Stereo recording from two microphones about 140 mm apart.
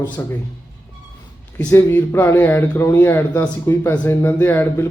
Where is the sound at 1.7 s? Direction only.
15° left (ahead or behind).